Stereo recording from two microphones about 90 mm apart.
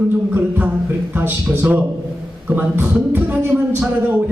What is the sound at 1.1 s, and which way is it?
A man's voice, 20° right (ahead or behind).